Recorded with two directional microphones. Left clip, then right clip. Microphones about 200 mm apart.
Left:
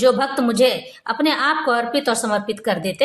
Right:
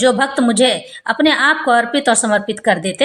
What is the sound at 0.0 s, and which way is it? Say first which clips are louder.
A woman's voice: right 3 dB; 15° right (ahead or behind).